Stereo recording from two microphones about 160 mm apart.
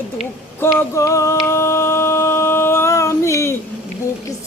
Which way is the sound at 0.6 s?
15° left (ahead or behind).